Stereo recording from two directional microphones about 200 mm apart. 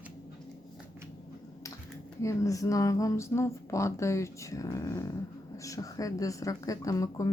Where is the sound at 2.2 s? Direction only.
15° left (ahead or behind).